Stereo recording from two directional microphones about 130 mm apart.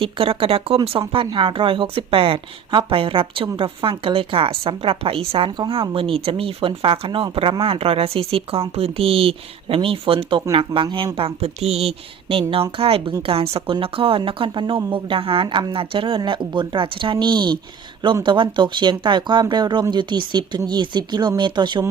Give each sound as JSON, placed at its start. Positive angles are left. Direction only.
{"t": 0.0, "sound": "a woman's voice", "side_deg": -45}